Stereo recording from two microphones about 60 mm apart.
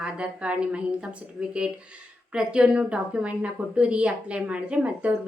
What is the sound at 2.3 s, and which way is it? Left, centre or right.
A woman's voice, centre.